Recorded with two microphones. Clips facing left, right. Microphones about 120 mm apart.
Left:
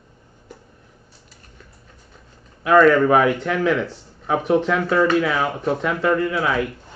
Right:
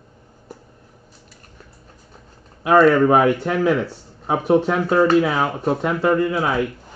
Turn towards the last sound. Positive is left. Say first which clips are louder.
# right 1 dB
turn(degrees=-30)  # may be behind; listen again after turning